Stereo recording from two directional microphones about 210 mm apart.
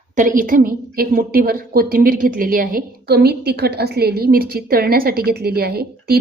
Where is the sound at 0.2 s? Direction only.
40° right (ahead or behind).